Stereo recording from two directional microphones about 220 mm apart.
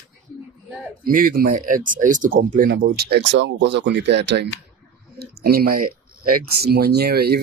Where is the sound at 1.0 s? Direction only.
40° right (ahead or behind).